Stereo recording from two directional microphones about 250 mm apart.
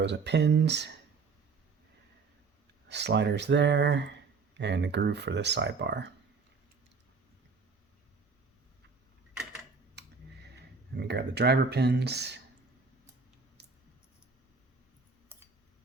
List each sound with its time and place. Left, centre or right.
0.0 s speech: right
2.9 s speech: right
11.1 s speech: right
13.6 s a sound: right